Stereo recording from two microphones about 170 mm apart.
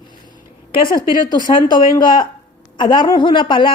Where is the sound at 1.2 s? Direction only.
25° left (ahead or behind).